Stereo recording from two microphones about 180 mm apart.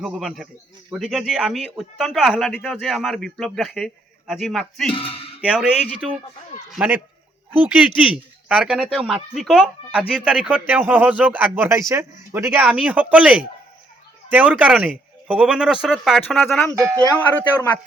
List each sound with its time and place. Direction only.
0.0 s speech: 5° right (ahead or behind)
4.9 s speech: 30° left (ahead or behind)
5.4 s speech: 5° right (ahead or behind)
16.7 s speech: 15° right (ahead or behind)
17.2 s speech: 10° left (ahead or behind)